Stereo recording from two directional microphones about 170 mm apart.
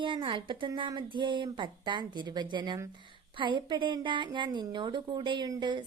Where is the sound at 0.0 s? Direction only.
30° right (ahead or behind).